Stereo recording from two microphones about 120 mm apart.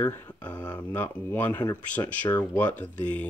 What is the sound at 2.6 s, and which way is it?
Speech, 15° left (ahead or behind).